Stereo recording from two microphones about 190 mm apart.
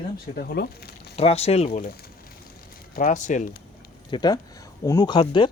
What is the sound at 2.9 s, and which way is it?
Speech, 45° left (ahead or behind).